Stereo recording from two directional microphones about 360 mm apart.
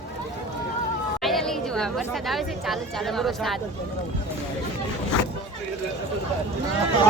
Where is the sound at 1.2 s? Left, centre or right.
Centre.